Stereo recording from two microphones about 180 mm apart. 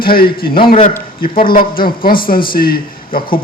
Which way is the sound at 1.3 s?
30° left (ahead or behind).